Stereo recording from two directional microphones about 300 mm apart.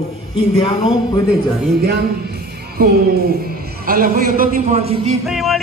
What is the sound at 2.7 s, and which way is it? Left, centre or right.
A man's voice, right.